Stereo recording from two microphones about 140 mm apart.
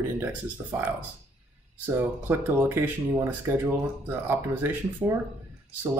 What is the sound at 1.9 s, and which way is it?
Speech, 15° right (ahead or behind).